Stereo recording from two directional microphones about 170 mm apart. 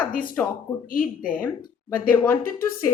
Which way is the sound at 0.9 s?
55° left (ahead or behind).